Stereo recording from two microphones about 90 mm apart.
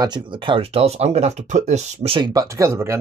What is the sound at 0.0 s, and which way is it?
Speech, 60° right (ahead or behind).